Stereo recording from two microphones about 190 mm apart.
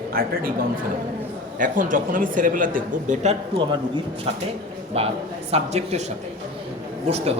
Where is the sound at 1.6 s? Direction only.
45° right (ahead or behind).